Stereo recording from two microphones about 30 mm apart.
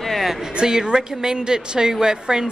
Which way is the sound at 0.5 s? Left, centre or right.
Right.